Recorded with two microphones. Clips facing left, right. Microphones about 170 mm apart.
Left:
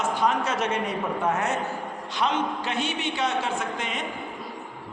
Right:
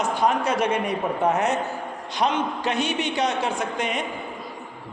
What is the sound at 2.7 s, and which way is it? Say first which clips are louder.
A man's voice: right 4 dB; 15° right (ahead or behind).